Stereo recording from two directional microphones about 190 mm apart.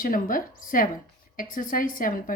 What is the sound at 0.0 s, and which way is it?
A woman's voice, 45° left (ahead or behind).